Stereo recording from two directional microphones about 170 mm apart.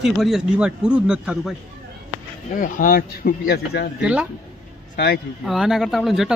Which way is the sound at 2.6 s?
55° left (ahead or behind).